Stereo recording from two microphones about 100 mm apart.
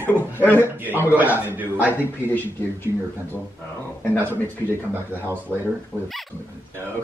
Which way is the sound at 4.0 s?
20° left (ahead or behind).